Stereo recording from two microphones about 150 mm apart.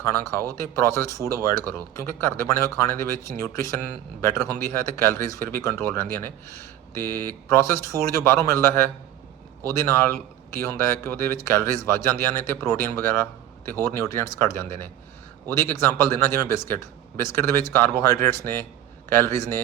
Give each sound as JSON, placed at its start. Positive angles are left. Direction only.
{"t": 0.0, "sound": "a man's voice", "side_deg": 20}
{"t": 7.0, "sound": "speech", "side_deg": -70}
{"t": 7.4, "sound": "a man's voice", "side_deg": 20}